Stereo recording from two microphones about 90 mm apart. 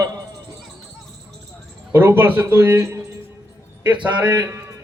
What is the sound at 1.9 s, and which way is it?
Speech, 30° right (ahead or behind).